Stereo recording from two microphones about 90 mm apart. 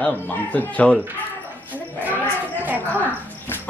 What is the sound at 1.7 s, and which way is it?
Goat, 20° right (ahead or behind).